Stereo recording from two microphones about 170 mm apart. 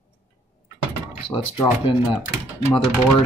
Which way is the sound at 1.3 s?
30° left (ahead or behind).